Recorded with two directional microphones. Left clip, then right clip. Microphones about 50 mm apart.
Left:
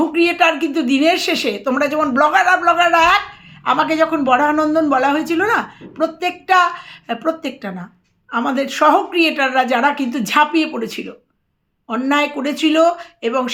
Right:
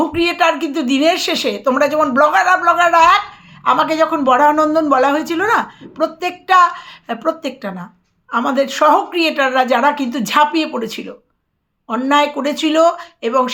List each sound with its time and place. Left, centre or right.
0.0 s a woman's voice: right
13.2 s speech: centre